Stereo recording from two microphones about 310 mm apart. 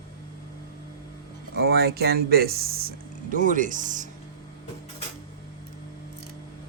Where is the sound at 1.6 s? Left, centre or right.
Right.